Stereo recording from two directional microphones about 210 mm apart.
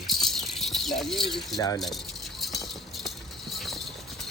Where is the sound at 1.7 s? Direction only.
Centre (ahead or behind).